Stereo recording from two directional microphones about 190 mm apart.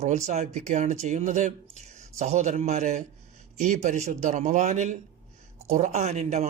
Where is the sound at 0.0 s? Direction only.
35° right (ahead or behind).